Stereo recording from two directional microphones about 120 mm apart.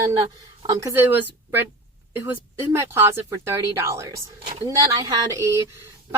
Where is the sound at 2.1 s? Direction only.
20° right (ahead or behind).